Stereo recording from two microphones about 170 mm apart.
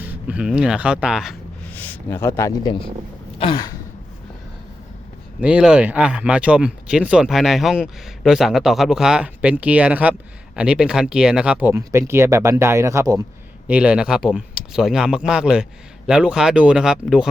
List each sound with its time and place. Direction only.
0.0 s speech: 5° right (ahead or behind)
1.7 s speech: 10° left (ahead or behind)
3.3 s a sound: 30° left (ahead or behind)
5.4 s speech: 5° right (ahead or behind)
13.7 s speech: 5° right (ahead or behind)